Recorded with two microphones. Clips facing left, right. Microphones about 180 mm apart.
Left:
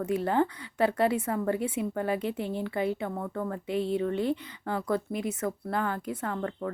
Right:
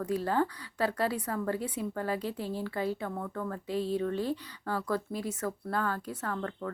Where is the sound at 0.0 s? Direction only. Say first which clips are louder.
Left 3 dB; 25° left (ahead or behind).